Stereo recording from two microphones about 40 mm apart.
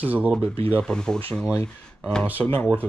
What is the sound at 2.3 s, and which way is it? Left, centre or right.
Speech, left.